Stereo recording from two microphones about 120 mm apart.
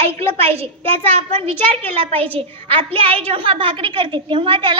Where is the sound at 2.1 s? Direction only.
15° left (ahead or behind).